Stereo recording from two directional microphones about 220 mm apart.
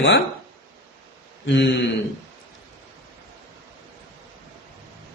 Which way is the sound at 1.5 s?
50° left (ahead or behind).